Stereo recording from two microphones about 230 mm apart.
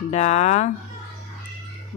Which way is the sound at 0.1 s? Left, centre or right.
Left.